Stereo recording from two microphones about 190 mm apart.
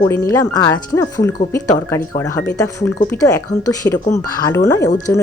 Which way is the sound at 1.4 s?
40° left (ahead or behind).